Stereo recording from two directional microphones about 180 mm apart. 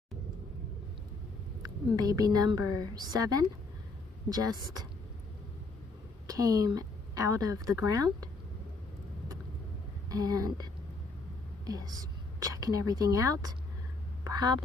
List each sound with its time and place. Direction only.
2.0 s a woman's voice: 20° right (ahead or behind)
6.2 s a woman's voice: 20° right (ahead or behind)
10.0 s a woman's voice: 20° right (ahead or behind)
14.2 s a sound: 20° right (ahead or behind)